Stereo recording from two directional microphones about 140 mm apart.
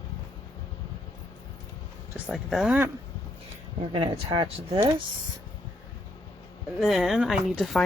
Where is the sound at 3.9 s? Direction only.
40° right (ahead or behind).